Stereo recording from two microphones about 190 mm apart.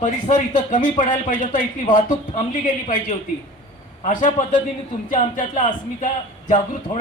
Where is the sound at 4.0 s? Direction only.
45° left (ahead or behind).